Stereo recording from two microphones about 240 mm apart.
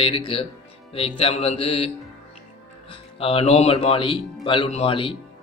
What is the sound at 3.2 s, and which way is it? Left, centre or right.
A man's voice, left.